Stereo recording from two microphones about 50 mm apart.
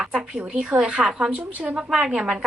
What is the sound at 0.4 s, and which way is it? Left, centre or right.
A woman's voice, centre.